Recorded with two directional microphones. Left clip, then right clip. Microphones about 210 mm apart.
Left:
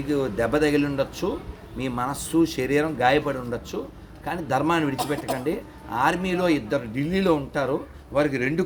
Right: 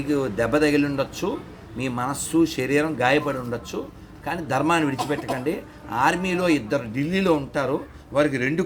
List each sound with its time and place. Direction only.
0.1 s speech: 5° right (ahead or behind)